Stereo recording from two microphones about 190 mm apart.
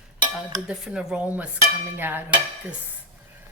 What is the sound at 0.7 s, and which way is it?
Speech, 5° right (ahead or behind).